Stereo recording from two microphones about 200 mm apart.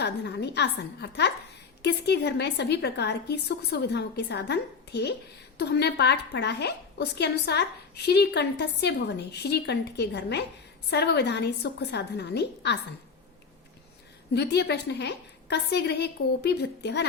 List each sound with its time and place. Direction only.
0.0 s a woman's voice: 55° left (ahead or behind)
14.3 s a woman's voice: 55° left (ahead or behind)